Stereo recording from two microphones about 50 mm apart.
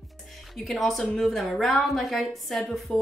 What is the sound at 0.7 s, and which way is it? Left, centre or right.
Speech, centre.